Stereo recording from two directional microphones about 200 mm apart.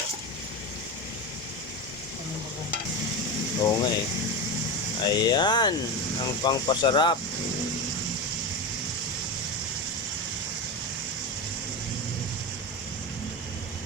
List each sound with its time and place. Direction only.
3.6 s speech: 20° left (ahead or behind)
5.0 s speech: 20° left (ahead or behind)